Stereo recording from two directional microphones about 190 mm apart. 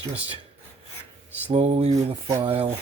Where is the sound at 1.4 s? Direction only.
35° right (ahead or behind).